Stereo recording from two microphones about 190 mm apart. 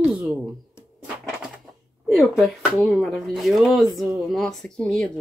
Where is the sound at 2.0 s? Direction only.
Centre (ahead or behind).